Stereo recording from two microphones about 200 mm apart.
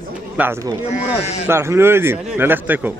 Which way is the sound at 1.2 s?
35° left (ahead or behind).